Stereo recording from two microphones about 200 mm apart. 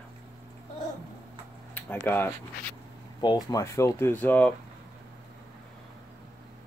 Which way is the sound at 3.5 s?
15° left (ahead or behind).